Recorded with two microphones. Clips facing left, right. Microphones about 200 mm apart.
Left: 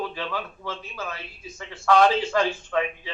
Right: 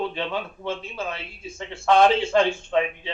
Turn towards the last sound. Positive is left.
turn(degrees=-25)  # may be behind; listen again after turning